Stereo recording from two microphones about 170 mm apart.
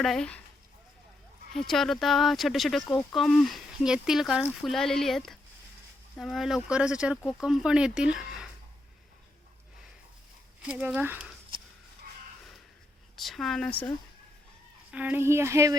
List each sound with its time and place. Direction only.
0.0 s speech: 5° left (ahead or behind)
1.5 s speech: centre (ahead or behind)
10.6 s speech: 5° right (ahead or behind)
13.1 s speech: centre (ahead or behind)
14.9 s speech: 10° right (ahead or behind)